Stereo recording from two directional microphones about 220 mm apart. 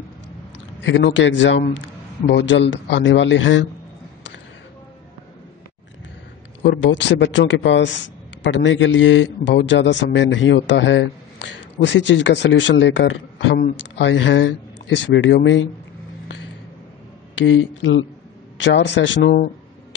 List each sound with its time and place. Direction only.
0.8 s a man's voice: 55° left (ahead or behind)
6.6 s a man's voice: 55° left (ahead or behind)
17.4 s a man's voice: 60° left (ahead or behind)